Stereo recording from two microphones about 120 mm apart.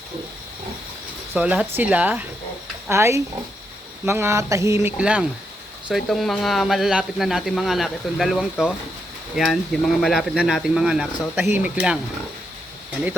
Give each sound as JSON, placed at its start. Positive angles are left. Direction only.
{"t": 1.3, "sound": "speech", "side_deg": -10}
{"t": 4.9, "sound": "speech", "side_deg": -10}
{"t": 5.9, "sound": "speech", "side_deg": 0}